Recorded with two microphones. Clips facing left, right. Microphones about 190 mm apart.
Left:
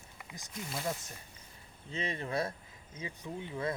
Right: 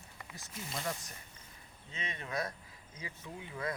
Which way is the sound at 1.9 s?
35° left (ahead or behind).